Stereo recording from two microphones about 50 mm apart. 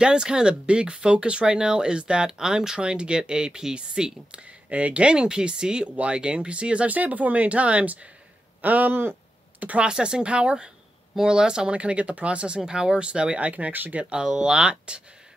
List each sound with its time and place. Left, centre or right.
0.0 s speech: centre
9.8 s speech: centre